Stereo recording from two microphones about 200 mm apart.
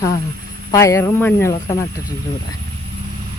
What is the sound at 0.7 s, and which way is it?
Speech, 15° left (ahead or behind).